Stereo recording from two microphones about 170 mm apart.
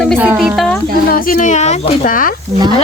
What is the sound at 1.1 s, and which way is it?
Speech, 55° left (ahead or behind).